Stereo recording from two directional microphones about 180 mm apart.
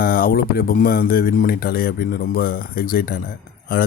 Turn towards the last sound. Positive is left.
turn(degrees=55)  # may be behind; listen again after turning